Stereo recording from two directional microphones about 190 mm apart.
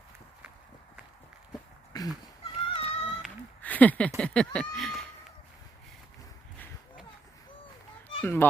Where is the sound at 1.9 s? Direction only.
20° left (ahead or behind).